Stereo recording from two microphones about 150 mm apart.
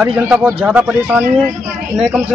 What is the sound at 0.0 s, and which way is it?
A man's voice, 5° right (ahead or behind).